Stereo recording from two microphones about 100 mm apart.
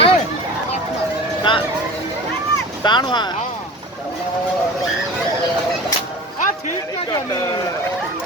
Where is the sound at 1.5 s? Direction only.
55° left (ahead or behind).